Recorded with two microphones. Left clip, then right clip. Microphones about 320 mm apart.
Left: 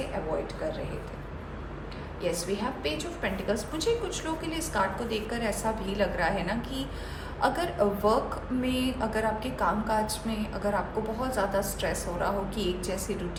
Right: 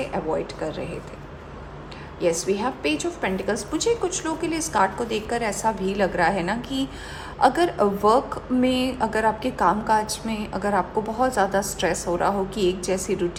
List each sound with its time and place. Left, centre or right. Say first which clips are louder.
2.2 s a woman's voice: right 8 dB; centre